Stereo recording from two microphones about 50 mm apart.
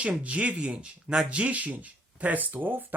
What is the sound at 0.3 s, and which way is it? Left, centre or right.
Speech, right.